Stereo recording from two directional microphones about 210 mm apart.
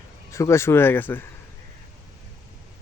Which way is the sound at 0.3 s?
15° left (ahead or behind).